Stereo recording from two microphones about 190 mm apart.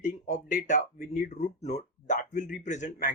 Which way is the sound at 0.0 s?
40° left (ahead or behind).